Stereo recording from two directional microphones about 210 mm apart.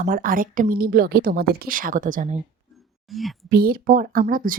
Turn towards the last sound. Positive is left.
turn(degrees=-40)  # may be behind; listen again after turning